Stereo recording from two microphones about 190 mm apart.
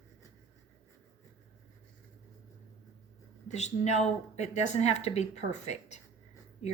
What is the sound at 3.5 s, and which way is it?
A woman's voice, 35° left (ahead or behind).